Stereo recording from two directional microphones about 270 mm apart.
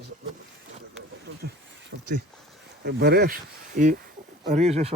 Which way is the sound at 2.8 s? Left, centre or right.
Right.